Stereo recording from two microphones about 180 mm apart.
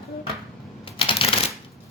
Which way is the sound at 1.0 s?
30° left (ahead or behind).